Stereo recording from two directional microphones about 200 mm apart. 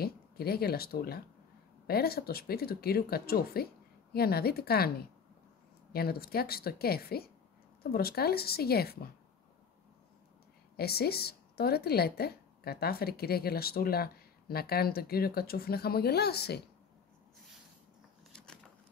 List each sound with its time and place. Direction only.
0.0 s a woman's voice: 50° left (ahead or behind)
5.9 s a woman's voice: 50° left (ahead or behind)
10.8 s a woman's voice: 50° left (ahead or behind)
18.3 s a sound: 5° left (ahead or behind)